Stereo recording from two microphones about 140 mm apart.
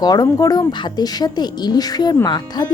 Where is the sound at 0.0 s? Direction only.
25° left (ahead or behind).